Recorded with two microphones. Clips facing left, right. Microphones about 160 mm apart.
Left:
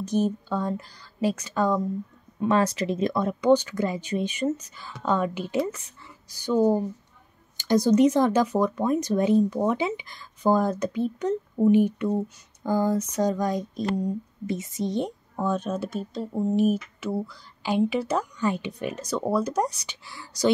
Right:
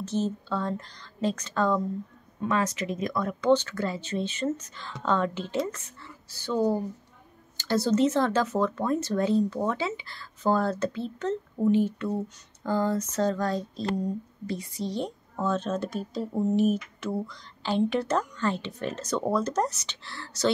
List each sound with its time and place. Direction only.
0.0 s speech: 15° left (ahead or behind)
2.4 s speech: 35° left (ahead or behind); by 20.5 s 10° left (ahead or behind)